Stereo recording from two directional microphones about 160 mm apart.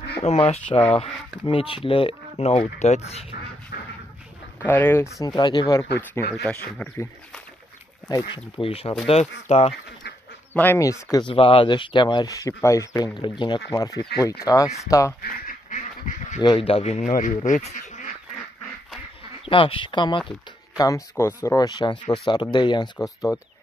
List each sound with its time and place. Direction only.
0.2 s speech: 40° left (ahead or behind)
0.7 s speech: 10° left (ahead or behind)
0.9 s speech: 35° left (ahead or behind)
3.7 s dog: 70° left (ahead or behind)
4.6 s speech: 10° left (ahead or behind)
5.2 s speech: 25° left (ahead or behind)
6.3 s speech: 10° left (ahead or behind)
8.1 s speech: 30° left (ahead or behind)
10.5 s speech: 15° left (ahead or behind)
11.2 s speech: 30° left (ahead or behind)
15.2 s duck: 60° left (ahead or behind)
16.3 s speech: 30° left (ahead or behind); by 18.1 s 50° left (ahead or behind)
19.4 s speech: 35° left (ahead or behind)
23.0 s speech: 20° left (ahead or behind)